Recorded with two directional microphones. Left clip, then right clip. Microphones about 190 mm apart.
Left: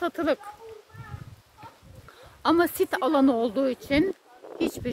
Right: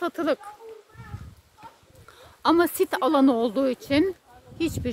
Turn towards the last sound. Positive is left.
turn(degrees=-25)  # may be behind; listen again after turning